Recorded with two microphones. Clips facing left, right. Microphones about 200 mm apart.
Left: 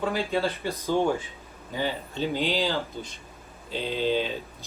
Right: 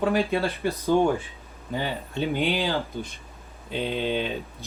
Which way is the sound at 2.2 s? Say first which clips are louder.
Right 2 dB; 55° right (ahead or behind).